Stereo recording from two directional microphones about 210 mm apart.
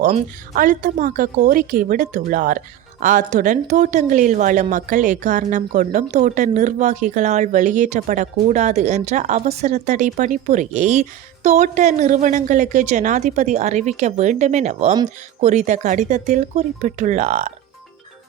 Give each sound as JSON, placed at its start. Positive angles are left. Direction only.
{"t": 0.0, "sound": "a woman's voice", "side_deg": -40}